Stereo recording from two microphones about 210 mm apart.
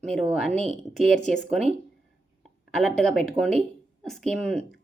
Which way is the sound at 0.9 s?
Centre (ahead or behind).